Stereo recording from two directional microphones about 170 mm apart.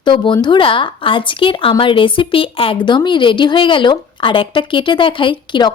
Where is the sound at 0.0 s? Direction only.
30° left (ahead or behind).